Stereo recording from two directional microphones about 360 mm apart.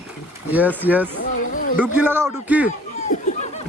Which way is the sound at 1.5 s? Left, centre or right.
Left.